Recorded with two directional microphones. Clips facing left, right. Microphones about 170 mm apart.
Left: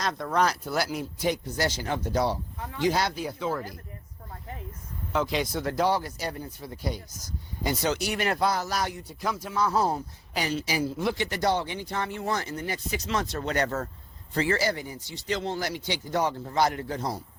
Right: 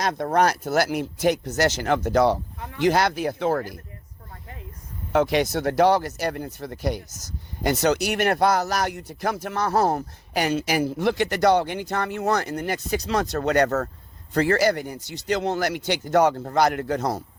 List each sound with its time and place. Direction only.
0.0 s speech: 65° right (ahead or behind)
5.1 s speech: 70° right (ahead or behind); by 13.4 s 40° right (ahead or behind)
13.4 s speech: 60° right (ahead or behind)
13.7 s speech: 40° right (ahead or behind)
14.7 s speech: 65° right (ahead or behind)
15.5 s speech: 60° right (ahead or behind)
16.3 s speech: 45° right (ahead or behind)
16.6 s speech: 65° right (ahead or behind)